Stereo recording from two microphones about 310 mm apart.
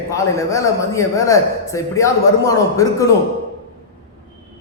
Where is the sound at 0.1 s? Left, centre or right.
Centre.